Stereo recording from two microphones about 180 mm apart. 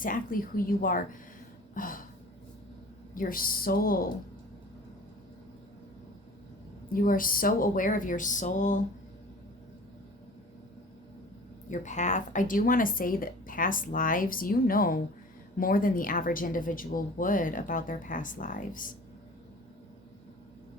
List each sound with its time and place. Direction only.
0.0 s a woman's voice: 50° left (ahead or behind)
1.7 s a sound: 50° left (ahead or behind)
3.2 s a woman's voice: 50° left (ahead or behind)
6.9 s a woman's voice: 50° left (ahead or behind)
11.7 s a woman's voice: 40° left (ahead or behind)